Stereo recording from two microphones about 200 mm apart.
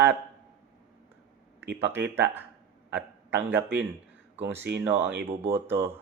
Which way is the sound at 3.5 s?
10° right (ahead or behind).